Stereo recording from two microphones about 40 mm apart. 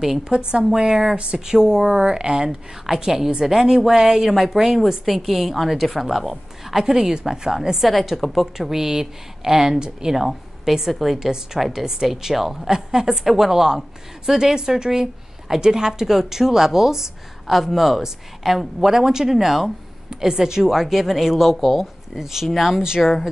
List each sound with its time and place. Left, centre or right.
0.5 s a woman's voice: right
2.9 s a woman's voice: centre
7.9 s a woman's voice: centre
22.8 s speech: centre